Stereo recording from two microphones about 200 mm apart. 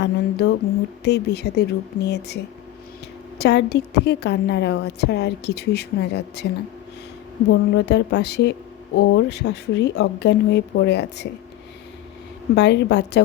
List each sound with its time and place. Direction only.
0.0 s a woman's voice: 55° left (ahead or behind)
12.5 s a woman's voice: 60° left (ahead or behind)